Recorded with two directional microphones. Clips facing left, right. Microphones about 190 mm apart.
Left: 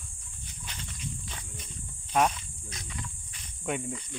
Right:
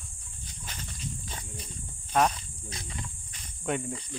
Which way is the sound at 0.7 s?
45° right (ahead or behind).